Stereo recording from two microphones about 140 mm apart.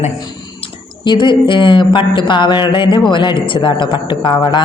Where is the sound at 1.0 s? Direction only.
35° left (ahead or behind).